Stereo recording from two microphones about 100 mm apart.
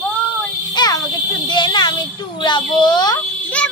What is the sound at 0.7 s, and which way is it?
A woman's voice, 40° left (ahead or behind).